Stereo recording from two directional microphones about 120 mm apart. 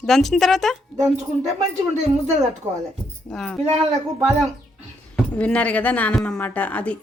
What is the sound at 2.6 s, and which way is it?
Speech, 20° right (ahead or behind).